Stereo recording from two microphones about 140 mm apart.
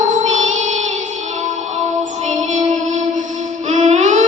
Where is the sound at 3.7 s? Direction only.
55° right (ahead or behind).